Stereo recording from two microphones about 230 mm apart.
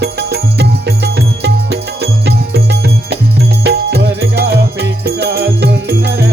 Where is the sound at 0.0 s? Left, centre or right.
Right.